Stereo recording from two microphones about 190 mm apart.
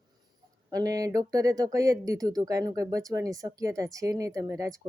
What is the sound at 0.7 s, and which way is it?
Speech, 20° right (ahead or behind).